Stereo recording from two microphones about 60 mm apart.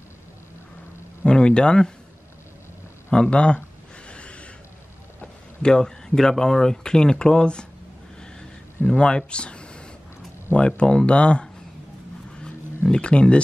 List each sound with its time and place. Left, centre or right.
1.2 s speech: centre
3.1 s speech: centre
4.1 s a sound: centre
5.2 s speech: centre
8.8 s speech: centre
12.4 s a sound: centre